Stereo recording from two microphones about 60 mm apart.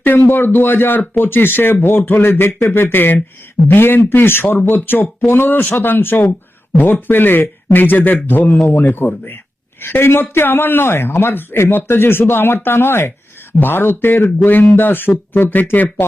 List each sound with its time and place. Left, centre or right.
0.0 s speech: left